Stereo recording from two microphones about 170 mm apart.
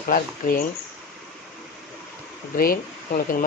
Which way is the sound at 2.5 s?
60° left (ahead or behind).